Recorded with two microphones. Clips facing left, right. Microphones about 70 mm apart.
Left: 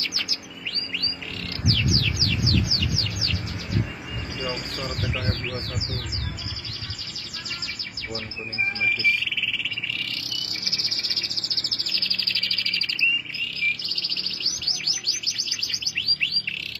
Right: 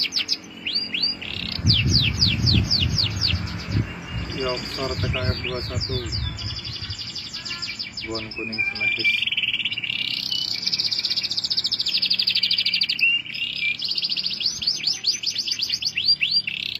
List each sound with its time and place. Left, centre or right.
0.1 s bird: left
8.8 s a sound: centre
10.8 s bird: centre
11.6 s bird vocalization: centre
15.0 s bird: centre